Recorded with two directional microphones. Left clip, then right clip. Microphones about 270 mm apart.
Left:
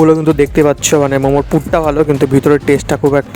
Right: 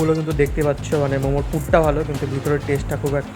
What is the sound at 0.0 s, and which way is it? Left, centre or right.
Speech, left.